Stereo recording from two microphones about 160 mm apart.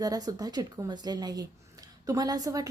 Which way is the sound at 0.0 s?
25° right (ahead or behind).